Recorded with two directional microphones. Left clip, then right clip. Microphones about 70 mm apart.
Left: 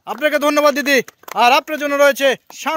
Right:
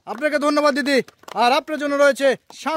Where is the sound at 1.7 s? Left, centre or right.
Right.